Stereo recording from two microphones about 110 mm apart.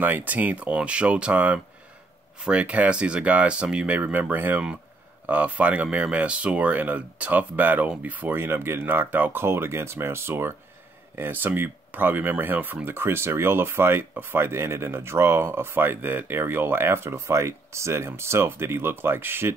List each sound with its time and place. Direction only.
0.0 s speech: 15° right (ahead or behind)